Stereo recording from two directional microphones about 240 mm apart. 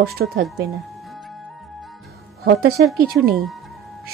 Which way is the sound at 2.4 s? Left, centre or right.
Right.